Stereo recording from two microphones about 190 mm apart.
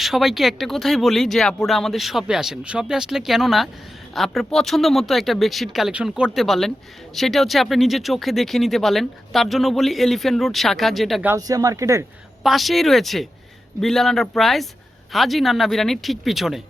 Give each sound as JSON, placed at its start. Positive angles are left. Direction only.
{"t": 0.0, "sound": "speech", "side_deg": 0}
{"t": 11.3, "sound": "speech", "side_deg": -20}
{"t": 12.4, "sound": "speech", "side_deg": 0}